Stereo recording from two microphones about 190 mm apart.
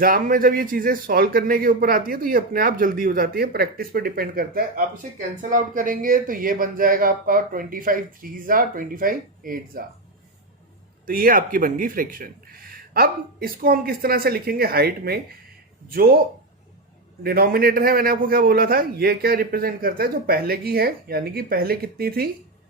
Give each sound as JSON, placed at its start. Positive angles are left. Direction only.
{"t": 0.0, "sound": "a man's voice", "side_deg": -50}
{"t": 11.0, "sound": "a man's voice", "side_deg": -50}
{"t": 17.2, "sound": "a man's voice", "side_deg": -55}